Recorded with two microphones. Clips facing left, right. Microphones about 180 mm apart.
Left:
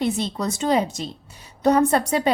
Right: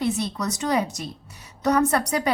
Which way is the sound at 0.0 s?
25° left (ahead or behind).